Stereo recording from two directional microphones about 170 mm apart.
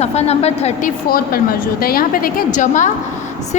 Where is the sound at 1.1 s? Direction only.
60° left (ahead or behind).